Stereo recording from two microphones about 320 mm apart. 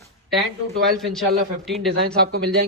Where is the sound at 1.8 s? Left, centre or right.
Right.